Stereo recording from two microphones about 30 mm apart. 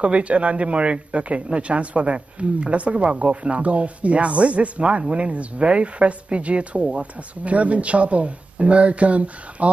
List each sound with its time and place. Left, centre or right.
0.0 s speech: right